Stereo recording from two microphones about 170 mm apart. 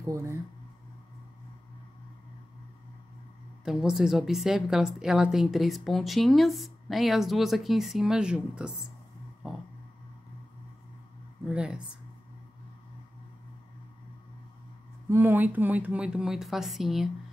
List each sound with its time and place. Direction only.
0.0 s speech: 15° right (ahead or behind)
3.6 s a woman's voice: 5° right (ahead or behind)
11.4 s a woman's voice: 5° right (ahead or behind)
15.0 s a woman's voice: 10° right (ahead or behind)